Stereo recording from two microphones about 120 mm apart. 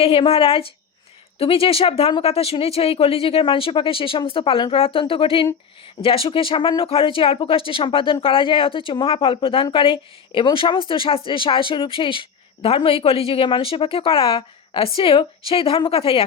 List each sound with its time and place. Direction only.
0.0 s a woman's voice: 55° left (ahead or behind)